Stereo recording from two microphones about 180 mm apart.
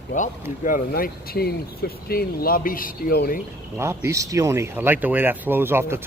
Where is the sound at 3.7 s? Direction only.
15° right (ahead or behind).